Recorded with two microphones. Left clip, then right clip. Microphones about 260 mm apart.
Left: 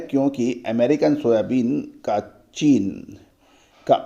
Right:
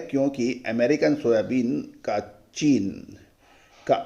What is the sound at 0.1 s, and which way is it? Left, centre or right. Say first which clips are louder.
Speech: left 3 dB; left.